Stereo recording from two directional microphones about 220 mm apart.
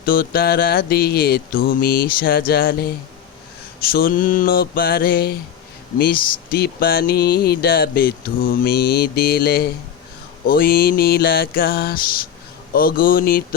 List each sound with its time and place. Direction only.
0.0 s mantra: 40° left (ahead or behind)
12.7 s speech: 40° left (ahead or behind)